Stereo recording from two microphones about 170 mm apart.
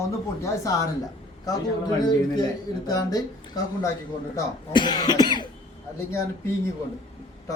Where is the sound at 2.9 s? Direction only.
20° left (ahead or behind).